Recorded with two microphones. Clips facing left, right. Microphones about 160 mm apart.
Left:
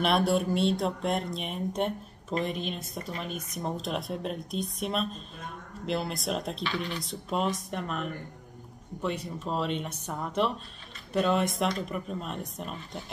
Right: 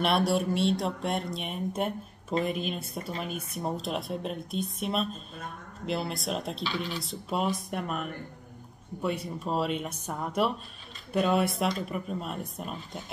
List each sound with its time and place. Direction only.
0.0 s speech: centre (ahead or behind)
9.0 s speech: 10° right (ahead or behind)